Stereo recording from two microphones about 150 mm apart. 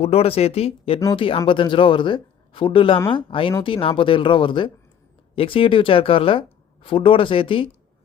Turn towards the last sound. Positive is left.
turn(degrees=35)  # may be behind; listen again after turning